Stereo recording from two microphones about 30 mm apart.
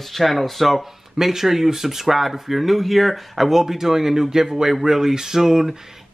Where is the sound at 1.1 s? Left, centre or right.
Centre.